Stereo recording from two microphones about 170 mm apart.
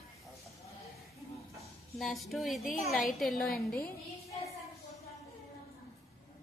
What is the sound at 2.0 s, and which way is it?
A woman's voice, centre (ahead or behind).